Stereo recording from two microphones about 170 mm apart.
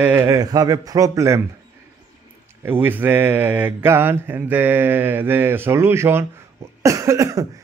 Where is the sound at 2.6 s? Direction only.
10° right (ahead or behind).